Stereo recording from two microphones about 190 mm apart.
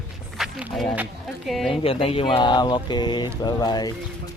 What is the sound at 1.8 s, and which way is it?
Speech, 30° left (ahead or behind).